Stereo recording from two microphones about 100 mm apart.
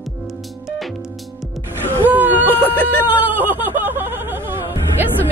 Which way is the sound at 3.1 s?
20° right (ahead or behind).